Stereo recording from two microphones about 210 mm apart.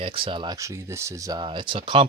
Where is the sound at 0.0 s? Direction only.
25° right (ahead or behind).